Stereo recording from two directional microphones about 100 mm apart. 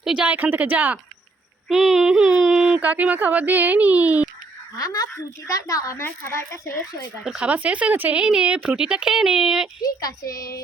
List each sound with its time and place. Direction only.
0.0 s speech: 10° right (ahead or behind)
1.6 s child singing: centre (ahead or behind)
2.8 s speech: 15° right (ahead or behind)
4.8 s a woman's voice: 35° left (ahead or behind)
7.3 s speech: 10° right (ahead or behind)
9.8 s a woman's voice: 40° left (ahead or behind)